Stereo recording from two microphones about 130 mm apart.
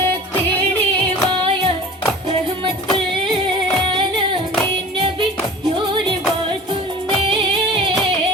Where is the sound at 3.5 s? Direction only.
40° right (ahead or behind).